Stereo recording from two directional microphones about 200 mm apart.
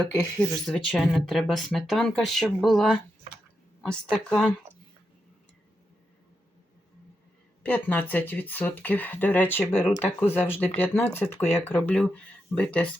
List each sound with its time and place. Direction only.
0.5 s speech: centre (ahead or behind)
7.6 s speech: 10° left (ahead or behind)
11.3 s speech: 30° left (ahead or behind)
11.6 s speech: 10° left (ahead or behind)